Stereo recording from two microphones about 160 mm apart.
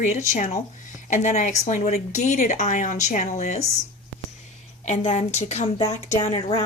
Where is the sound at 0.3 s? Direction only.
55° left (ahead or behind).